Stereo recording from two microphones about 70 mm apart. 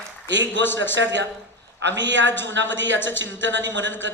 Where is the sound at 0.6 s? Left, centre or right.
Left.